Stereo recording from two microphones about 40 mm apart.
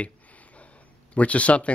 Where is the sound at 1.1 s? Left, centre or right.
Left.